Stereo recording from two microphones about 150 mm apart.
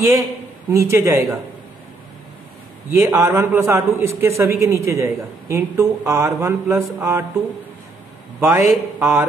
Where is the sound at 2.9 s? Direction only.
20° right (ahead or behind).